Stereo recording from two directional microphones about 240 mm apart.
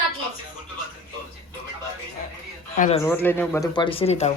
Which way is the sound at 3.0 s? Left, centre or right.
Centre.